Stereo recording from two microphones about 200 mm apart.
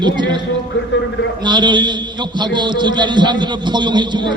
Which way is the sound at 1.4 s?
25° right (ahead or behind).